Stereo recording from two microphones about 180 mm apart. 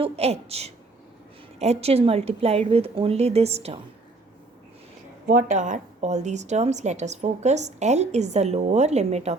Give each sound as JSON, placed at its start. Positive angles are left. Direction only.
{"t": 0.0, "sound": "speech", "side_deg": -35}
{"t": 5.2, "sound": "speech", "side_deg": -55}